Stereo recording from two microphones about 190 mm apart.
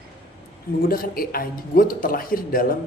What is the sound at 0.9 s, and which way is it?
A man's voice, 50° left (ahead or behind).